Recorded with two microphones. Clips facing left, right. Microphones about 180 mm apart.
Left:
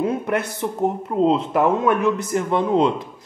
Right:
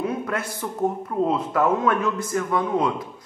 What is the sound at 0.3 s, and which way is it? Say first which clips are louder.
A man's voice: left 5 dB; 20° left (ahead or behind).